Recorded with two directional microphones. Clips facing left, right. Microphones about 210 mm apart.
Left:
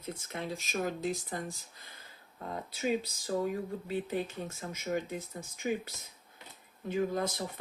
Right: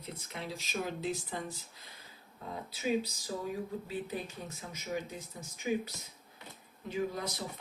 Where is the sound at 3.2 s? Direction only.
55° left (ahead or behind).